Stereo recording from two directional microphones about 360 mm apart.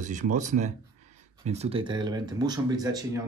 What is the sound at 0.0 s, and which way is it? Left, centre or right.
A man's voice, centre.